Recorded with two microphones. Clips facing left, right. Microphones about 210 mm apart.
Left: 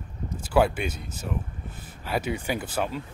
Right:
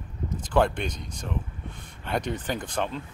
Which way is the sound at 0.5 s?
5° left (ahead or behind).